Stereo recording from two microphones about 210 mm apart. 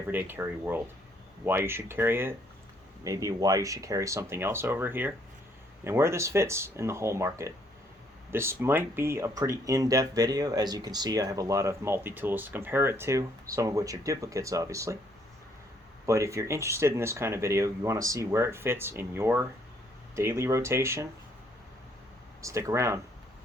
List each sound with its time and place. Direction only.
0.1 s speech: 10° right (ahead or behind)
16.0 s speech: 15° right (ahead or behind)
22.4 s speech: 15° right (ahead or behind)